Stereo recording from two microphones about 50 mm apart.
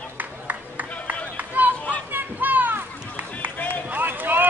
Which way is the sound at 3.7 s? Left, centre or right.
Right.